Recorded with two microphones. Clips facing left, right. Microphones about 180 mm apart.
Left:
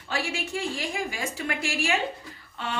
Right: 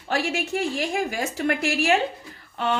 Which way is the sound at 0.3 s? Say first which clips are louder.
Right 5 dB; 65° right (ahead or behind).